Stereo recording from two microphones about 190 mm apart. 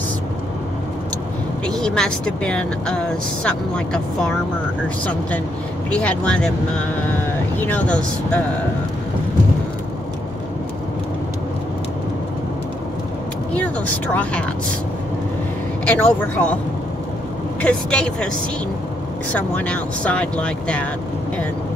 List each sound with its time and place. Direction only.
1.7 s speech: 5° left (ahead or behind)
5.9 s speech: 5° left (ahead or behind)
7.5 s speech: 10° left (ahead or behind)
13.5 s speech: 5° left (ahead or behind)
15.8 s speech: 10° left (ahead or behind)
17.6 s speech: 5° left (ahead or behind)
19.3 s speech: 10° left (ahead or behind)